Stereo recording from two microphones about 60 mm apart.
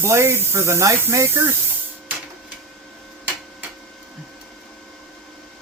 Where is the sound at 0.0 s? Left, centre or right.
Right.